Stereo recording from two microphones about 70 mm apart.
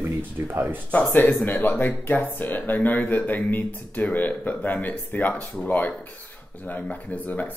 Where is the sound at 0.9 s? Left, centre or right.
Left.